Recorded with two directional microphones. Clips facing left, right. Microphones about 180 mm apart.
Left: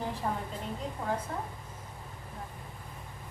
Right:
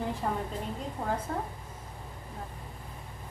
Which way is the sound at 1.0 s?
40° right (ahead or behind).